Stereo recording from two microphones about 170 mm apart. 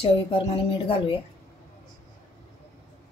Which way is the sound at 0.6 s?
30° left (ahead or behind).